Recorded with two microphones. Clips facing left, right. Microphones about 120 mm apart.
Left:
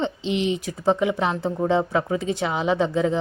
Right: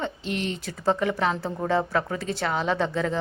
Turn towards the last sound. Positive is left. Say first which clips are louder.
# left 4 dB
turn(degrees=15)  # may be behind; listen again after turning